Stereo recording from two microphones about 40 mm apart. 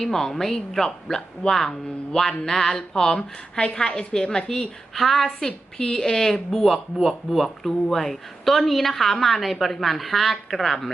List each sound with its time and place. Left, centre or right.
0.0 s speech: centre
3.6 s speech: left
4.9 s a woman's voice: centre
5.4 s a woman's voice: centre